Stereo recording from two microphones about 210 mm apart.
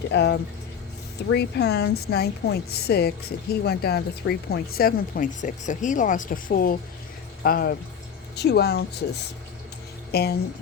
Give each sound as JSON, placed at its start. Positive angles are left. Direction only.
{"t": 0.1, "sound": "a woman's voice", "side_deg": 55}
{"t": 10.1, "sound": "speech", "side_deg": 50}